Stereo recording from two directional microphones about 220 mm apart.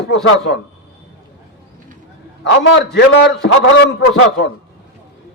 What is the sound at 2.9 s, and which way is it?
Speech, 50° left (ahead or behind).